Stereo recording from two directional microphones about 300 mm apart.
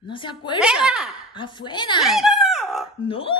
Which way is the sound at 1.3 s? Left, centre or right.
Centre.